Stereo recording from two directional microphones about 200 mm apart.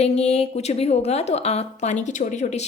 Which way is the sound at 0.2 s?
30° left (ahead or behind).